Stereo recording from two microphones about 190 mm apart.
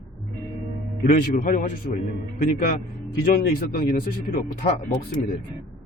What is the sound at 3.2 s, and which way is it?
Speech, 45° left (ahead or behind).